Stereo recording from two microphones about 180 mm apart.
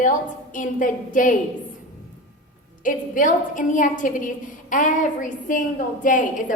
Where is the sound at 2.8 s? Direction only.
45° left (ahead or behind).